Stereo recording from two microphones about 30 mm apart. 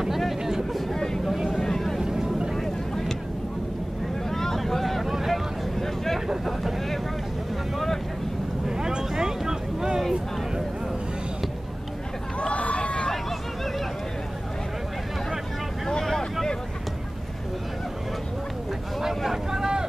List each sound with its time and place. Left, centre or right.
0.9 s vehicle: centre
2.0 s vehicle: centre
4.3 s vehicle: centre
5.0 s boat: centre
8.6 s vehicle: right
12.4 s a sound: left
16.0 s boat: centre
18.9 s vehicle: centre